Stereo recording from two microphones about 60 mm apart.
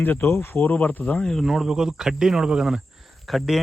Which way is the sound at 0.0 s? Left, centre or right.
Left.